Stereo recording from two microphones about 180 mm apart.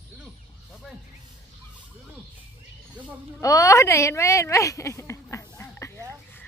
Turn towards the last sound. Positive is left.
turn(degrees=15)  # may be behind; listen again after turning